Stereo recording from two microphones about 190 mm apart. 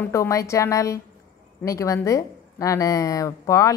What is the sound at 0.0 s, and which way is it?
A woman's voice, 15° left (ahead or behind).